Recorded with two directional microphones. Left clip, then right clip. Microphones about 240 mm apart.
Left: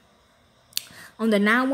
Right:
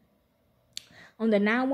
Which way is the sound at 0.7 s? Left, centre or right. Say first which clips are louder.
Left 8 dB; left.